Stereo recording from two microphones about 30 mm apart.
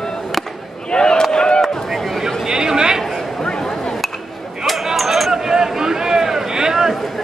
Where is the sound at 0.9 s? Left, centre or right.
Left.